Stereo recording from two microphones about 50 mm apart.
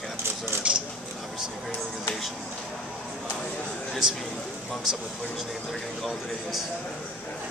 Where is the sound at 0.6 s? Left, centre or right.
Right.